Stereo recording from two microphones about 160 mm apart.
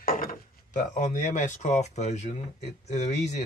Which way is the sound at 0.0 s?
60° left (ahead or behind).